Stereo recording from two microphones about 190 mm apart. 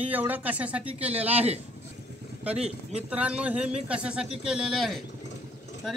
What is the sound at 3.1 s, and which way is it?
Speech, 5° right (ahead or behind).